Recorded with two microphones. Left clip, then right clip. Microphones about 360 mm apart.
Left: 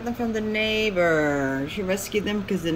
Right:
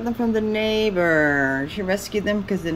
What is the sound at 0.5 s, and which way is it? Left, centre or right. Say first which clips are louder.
Speech: left 1 dB; centre.